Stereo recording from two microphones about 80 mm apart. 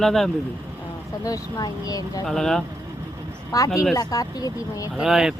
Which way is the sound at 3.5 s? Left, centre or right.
Left.